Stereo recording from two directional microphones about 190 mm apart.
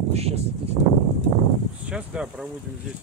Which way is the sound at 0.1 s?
35° right (ahead or behind).